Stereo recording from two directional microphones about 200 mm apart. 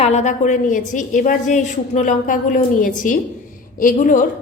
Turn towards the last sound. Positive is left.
turn(degrees=40)  # may be behind; listen again after turning